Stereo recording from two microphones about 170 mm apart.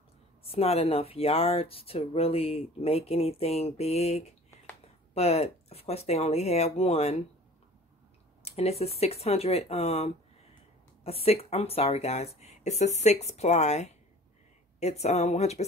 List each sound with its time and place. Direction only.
0.5 s speech: 35° left (ahead or behind)
8.4 s speech: 35° left (ahead or behind)